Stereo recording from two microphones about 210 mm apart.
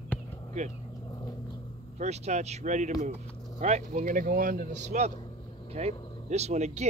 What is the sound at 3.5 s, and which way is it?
Speech, 35° right (ahead or behind).